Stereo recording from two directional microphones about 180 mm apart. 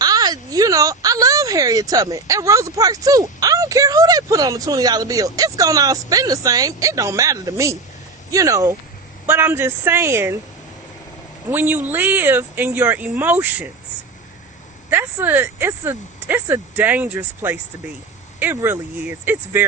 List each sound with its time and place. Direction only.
0.0 s speech: 20° right (ahead or behind)
11.5 s speech: 10° right (ahead or behind)
14.8 s speech: 10° right (ahead or behind)